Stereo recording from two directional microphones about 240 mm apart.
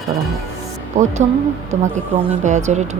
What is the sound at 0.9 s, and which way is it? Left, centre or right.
Speech, right.